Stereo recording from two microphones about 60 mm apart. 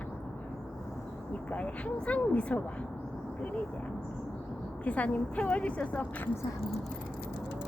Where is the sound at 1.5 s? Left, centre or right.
Left.